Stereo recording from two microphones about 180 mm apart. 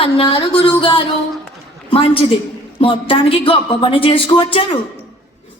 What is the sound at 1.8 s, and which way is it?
A woman's voice, 30° left (ahead or behind).